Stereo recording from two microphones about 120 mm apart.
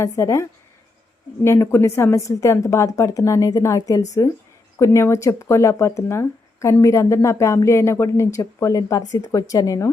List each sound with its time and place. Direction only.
0.0 s speech: 25° left (ahead or behind)
1.5 s speech: 20° left (ahead or behind)